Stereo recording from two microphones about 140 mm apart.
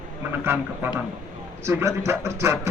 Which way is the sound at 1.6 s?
20° right (ahead or behind).